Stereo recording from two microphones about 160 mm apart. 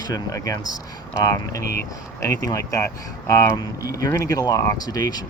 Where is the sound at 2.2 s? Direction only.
20° left (ahead or behind).